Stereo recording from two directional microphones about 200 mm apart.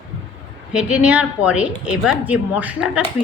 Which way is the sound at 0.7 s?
5° right (ahead or behind).